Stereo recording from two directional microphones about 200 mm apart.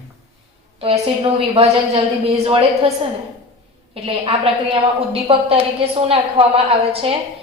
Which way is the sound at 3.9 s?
25° right (ahead or behind).